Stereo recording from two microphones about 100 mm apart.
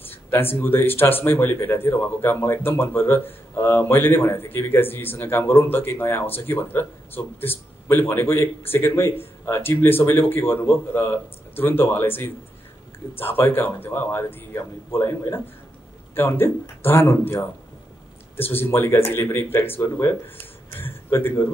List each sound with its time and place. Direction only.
0.0 s a man's voice: 20° left (ahead or behind)